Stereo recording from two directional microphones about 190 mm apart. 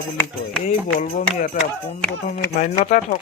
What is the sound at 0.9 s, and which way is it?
Speech, 45° left (ahead or behind).